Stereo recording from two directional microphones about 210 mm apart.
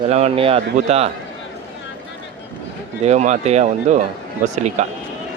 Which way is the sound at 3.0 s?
30° right (ahead or behind).